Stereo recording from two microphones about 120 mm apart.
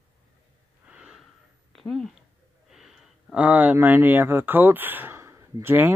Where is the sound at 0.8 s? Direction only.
5° right (ahead or behind).